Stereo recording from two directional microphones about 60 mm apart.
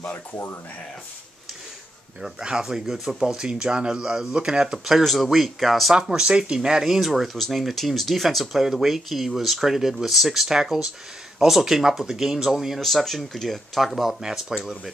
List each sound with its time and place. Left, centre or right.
0.0 s speech: left
2.2 s speech: centre